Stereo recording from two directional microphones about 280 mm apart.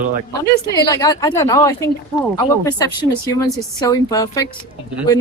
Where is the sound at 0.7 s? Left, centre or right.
Centre.